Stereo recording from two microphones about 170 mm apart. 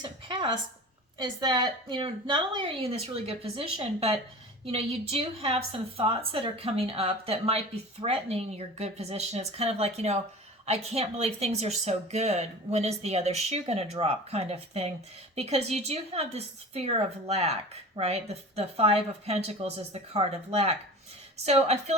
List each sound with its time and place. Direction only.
0.0 s a woman's voice: 25° right (ahead or behind)